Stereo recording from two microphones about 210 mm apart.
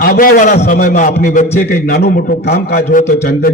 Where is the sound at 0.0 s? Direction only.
45° left (ahead or behind).